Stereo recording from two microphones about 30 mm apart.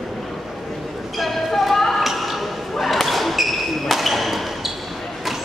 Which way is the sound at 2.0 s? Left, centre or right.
Centre.